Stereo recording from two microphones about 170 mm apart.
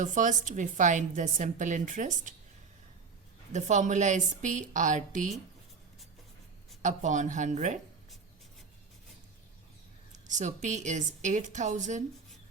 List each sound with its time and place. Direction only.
0.0 s a woman's voice: 45° right (ahead or behind)
3.5 s a woman's voice: 45° right (ahead or behind)
6.8 s a woman's voice: 45° right (ahead or behind)
10.2 s a woman's voice: 45° right (ahead or behind)